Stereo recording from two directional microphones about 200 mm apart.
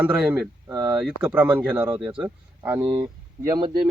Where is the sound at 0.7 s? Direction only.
15° right (ahead or behind).